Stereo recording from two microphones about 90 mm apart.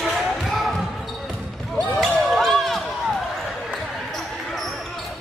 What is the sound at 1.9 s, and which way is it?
Basketball bounce, centre (ahead or behind).